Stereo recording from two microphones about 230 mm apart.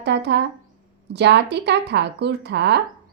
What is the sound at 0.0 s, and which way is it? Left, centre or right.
Speech, right.